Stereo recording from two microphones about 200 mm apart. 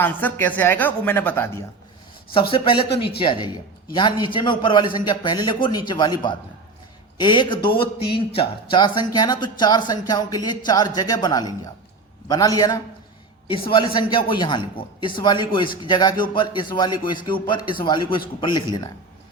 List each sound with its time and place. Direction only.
0.0 s a woman's voice: 10° left (ahead or behind)
2.3 s speech: 25° left (ahead or behind)